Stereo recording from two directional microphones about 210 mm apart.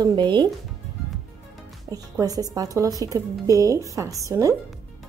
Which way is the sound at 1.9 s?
15° right (ahead or behind).